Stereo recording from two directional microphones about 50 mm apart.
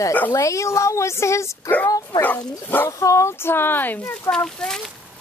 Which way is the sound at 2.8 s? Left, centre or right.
Left.